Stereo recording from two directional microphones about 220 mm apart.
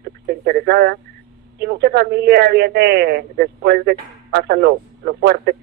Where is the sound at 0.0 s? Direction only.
45° right (ahead or behind).